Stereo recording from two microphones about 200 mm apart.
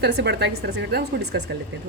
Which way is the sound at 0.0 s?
60° right (ahead or behind).